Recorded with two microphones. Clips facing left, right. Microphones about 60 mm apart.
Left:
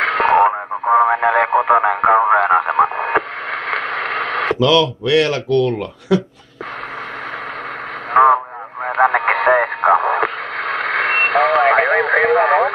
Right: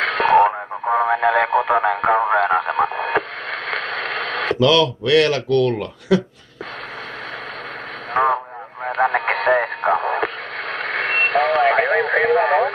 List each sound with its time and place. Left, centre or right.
0.0 s radio: centre
1.0 s speech: centre
2.7 s radio: centre
8.1 s radio: centre
8.8 s radio: left
9.9 s radio: left
12.4 s radio: left